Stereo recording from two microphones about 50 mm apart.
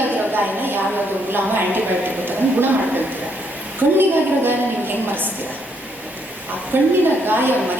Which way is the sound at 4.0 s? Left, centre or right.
Right.